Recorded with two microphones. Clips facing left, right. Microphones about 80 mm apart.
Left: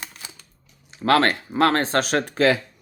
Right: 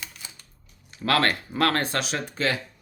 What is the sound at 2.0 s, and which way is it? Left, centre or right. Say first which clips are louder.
Speech: left 7 dB; left.